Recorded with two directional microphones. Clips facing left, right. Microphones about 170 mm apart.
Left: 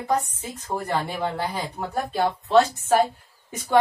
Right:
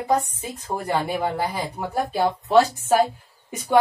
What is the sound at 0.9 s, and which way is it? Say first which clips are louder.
A woman's voice: right 4 dB; 10° right (ahead or behind).